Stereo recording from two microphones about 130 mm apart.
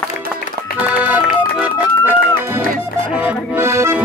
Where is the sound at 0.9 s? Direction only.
10° right (ahead or behind).